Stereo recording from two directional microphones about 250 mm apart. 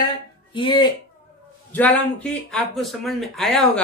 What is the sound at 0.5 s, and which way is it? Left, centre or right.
Speech, centre.